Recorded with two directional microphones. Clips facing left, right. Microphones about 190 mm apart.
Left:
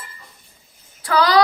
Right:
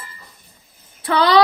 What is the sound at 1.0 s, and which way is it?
Speech, 25° right (ahead or behind).